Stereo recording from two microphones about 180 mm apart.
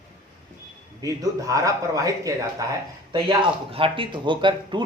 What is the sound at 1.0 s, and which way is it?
Speech, 20° right (ahead or behind).